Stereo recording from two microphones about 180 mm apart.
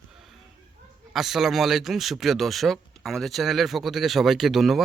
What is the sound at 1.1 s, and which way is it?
Speech, centre (ahead or behind).